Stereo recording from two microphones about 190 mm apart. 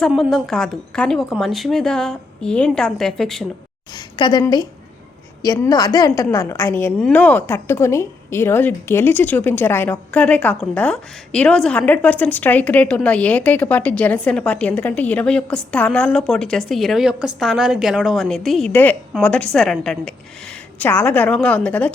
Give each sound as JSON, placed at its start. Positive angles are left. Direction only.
{"t": 0.1, "sound": "a woman's voice", "side_deg": 0}
{"t": 3.9, "sound": "a woman's voice", "side_deg": 20}